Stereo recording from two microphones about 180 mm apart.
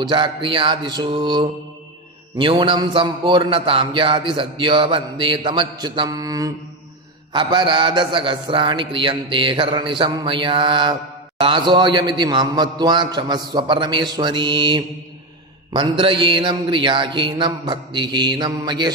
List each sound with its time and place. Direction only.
0.0 s a man's voice: 25° right (ahead or behind)